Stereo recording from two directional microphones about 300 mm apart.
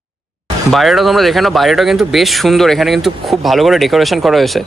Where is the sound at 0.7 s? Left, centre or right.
Centre.